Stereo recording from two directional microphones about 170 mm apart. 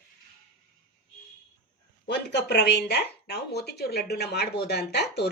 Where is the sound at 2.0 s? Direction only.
80° left.